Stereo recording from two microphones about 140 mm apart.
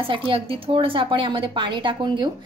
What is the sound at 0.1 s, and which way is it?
A woman's voice, 40° right (ahead or behind).